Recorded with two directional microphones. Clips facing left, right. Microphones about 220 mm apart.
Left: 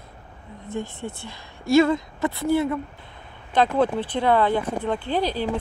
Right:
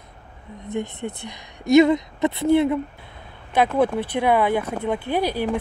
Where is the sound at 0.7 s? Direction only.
20° right (ahead or behind).